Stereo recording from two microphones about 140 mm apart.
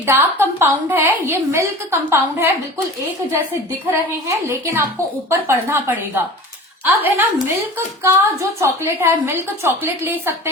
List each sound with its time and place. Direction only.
0.0 s a woman's voice: 15° right (ahead or behind)
4.4 s a woman's voice: 15° right (ahead or behind)